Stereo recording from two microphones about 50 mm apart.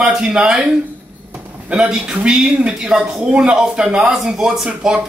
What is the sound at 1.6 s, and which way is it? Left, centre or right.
A man's voice, right.